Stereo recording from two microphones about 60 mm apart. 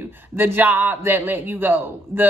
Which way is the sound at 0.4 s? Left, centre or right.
Right.